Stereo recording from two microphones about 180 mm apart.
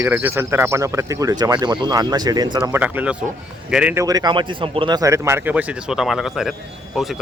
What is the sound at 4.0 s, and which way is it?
Speech, 20° right (ahead or behind).